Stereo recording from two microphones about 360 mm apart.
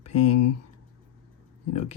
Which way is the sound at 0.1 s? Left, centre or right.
Left.